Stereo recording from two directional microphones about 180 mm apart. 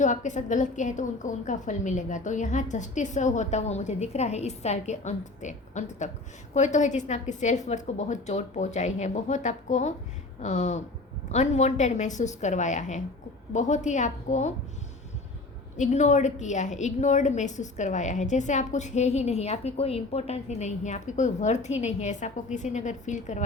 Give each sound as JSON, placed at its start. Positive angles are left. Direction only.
{"t": 0.0, "sound": "a woman's voice", "side_deg": 45}
{"t": 15.8, "sound": "a woman's voice", "side_deg": 40}